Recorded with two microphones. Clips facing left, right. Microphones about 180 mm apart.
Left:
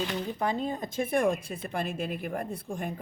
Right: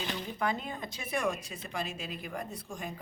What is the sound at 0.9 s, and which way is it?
Speech, 55° left (ahead or behind).